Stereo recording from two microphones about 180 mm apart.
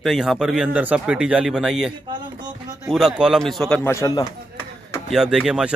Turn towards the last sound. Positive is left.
turn(degrees=-5)  # may be behind; listen again after turning